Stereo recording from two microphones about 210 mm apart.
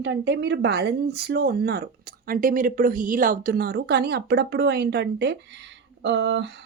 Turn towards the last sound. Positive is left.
turn(degrees=-55)  # may be behind; listen again after turning